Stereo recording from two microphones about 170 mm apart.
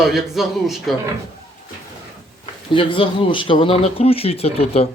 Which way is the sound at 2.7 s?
30° left (ahead or behind).